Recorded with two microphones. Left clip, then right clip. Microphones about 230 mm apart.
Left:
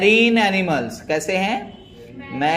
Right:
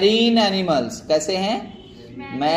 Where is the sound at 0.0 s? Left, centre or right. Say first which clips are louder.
Left 2 dB; left.